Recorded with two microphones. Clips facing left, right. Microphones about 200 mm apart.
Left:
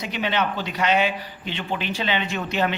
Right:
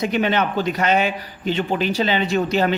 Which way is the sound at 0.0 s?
50° right (ahead or behind).